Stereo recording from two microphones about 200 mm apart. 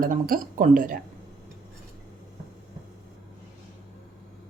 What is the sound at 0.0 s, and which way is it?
Speech, 40° right (ahead or behind).